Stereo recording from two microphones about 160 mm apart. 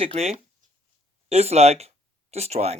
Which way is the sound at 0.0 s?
40° right (ahead or behind).